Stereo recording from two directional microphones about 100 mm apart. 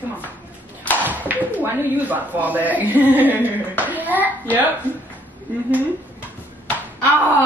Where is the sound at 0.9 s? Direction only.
15° right (ahead or behind).